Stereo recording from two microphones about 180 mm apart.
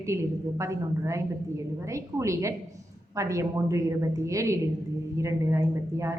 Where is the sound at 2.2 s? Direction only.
15° right (ahead or behind).